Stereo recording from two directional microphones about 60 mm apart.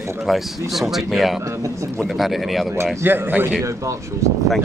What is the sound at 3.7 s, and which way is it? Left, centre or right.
Speech, right.